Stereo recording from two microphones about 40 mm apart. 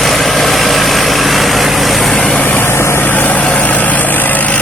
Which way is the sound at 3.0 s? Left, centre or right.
Left.